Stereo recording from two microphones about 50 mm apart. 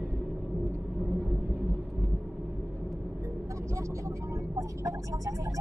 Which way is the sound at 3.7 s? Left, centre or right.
Right.